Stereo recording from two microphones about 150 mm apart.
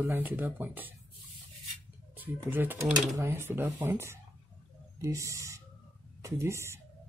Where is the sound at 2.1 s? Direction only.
10° right (ahead or behind).